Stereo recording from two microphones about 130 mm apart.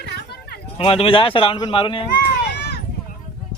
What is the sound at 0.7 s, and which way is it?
Speech, 45° left (ahead or behind).